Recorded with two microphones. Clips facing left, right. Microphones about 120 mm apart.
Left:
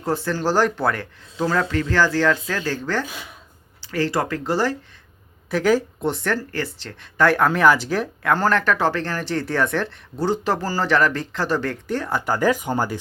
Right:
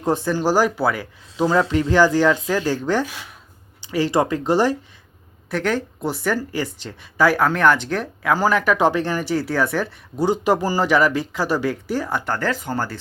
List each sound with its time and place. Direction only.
0.0 s speech: 15° right (ahead or behind)
5.5 s speech: centre (ahead or behind)